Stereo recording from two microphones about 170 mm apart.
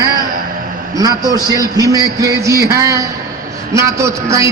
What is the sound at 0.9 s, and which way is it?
A man's voice, 20° right (ahead or behind).